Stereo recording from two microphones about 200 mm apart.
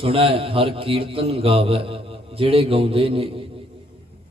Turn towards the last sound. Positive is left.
turn(degrees=-25)  # may be behind; listen again after turning